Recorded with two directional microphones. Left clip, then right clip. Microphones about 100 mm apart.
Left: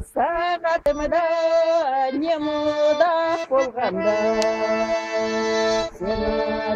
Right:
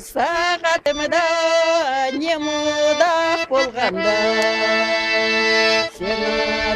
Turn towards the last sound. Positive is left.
turn(degrees=-30)  # may be behind; listen again after turning